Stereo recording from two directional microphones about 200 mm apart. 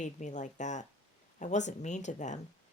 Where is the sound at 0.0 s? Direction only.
35° left (ahead or behind).